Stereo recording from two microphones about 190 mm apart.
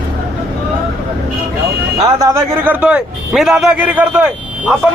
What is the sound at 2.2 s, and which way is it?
A man's voice, 10° right (ahead or behind).